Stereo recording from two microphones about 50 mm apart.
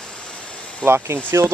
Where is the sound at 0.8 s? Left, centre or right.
Right.